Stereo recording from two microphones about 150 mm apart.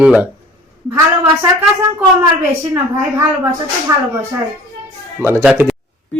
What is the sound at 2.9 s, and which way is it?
Speech, 20° right (ahead or behind).